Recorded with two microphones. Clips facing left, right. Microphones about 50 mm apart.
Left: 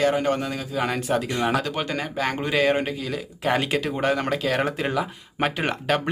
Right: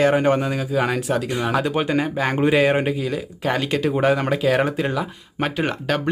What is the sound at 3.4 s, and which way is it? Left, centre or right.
Speech, centre.